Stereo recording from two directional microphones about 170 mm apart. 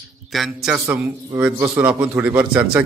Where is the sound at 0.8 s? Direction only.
15° right (ahead or behind).